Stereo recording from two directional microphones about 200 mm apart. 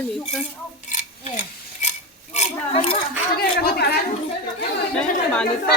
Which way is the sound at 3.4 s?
50° left (ahead or behind).